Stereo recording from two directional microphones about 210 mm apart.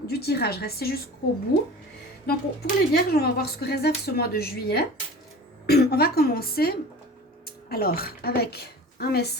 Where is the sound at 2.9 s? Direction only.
50° left (ahead or behind).